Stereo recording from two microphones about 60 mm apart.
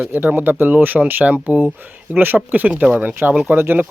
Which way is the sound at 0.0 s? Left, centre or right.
Right.